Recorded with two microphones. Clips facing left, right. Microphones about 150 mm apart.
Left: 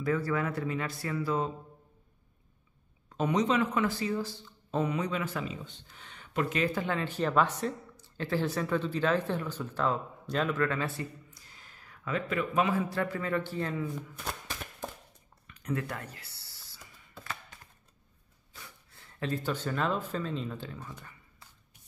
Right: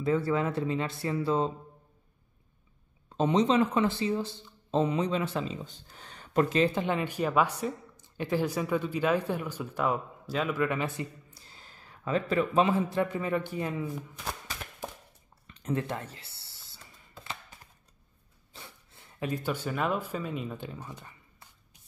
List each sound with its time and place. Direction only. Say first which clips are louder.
0.0 s speech: right 3 dB; 25° right (ahead or behind)
3.2 s speech: right 3 dB; 25° right (ahead or behind)
5.7 s speech: right 2 dB; 40° right (ahead or behind); by 10.9 s 15° right (ahead or behind)
11.2 s a man's voice: right 2 dB; 30° right (ahead or behind)
15.4 s a sound: right 2 dB; 25° right (ahead or behind)
18.5 s speech: right 2 dB; 25° right (ahead or behind)